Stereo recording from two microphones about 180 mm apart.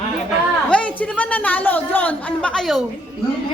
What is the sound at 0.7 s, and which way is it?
A woman's voice, 5° left (ahead or behind).